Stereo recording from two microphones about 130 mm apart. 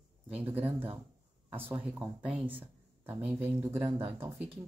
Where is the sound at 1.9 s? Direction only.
10° right (ahead or behind).